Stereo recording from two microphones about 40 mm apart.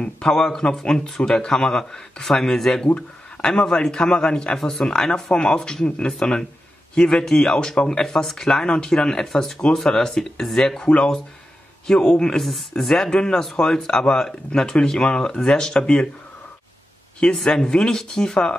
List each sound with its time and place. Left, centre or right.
0.3 s a man's voice: centre
12.0 s speech: centre
12.4 s a man's voice: centre
17.5 s speech: centre